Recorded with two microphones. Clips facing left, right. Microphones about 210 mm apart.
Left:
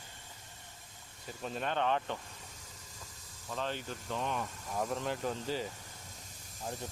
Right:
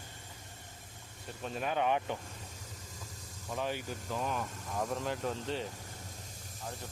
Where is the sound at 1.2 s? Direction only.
Centre (ahead or behind).